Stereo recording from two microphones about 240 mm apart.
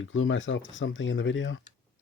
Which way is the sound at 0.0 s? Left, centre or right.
Left.